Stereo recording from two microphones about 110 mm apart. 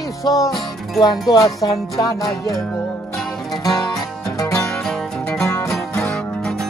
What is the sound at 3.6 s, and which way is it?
Music, 35° left (ahead or behind).